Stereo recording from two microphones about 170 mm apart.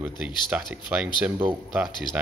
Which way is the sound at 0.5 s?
5° right (ahead or behind).